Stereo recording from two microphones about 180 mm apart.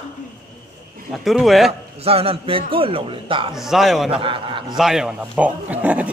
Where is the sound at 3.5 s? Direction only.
Centre (ahead or behind).